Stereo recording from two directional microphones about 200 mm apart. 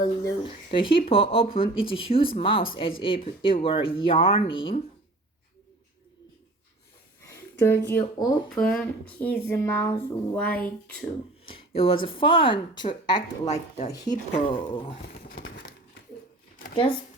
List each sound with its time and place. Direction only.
0.0 s speech: 15° left (ahead or behind)
0.4 s speech: 25° left (ahead or behind)
7.6 s speech: 10° left (ahead or behind)
8.4 s speech: centre (ahead or behind)
11.4 s speech: 30° left (ahead or behind)
13.4 s speech: 35° left (ahead or behind)
13.9 s speech: 20° left (ahead or behind)
16.7 s speech: 25° left (ahead or behind)